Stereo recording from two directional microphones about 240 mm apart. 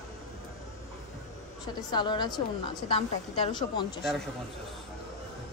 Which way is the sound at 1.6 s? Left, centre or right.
Centre.